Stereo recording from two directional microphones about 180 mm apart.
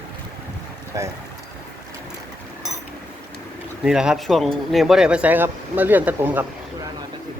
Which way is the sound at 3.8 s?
5° right (ahead or behind).